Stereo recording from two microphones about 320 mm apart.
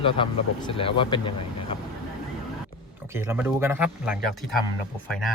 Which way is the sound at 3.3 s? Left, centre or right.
Centre.